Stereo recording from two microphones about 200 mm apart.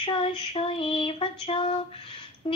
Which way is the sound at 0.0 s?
25° left (ahead or behind).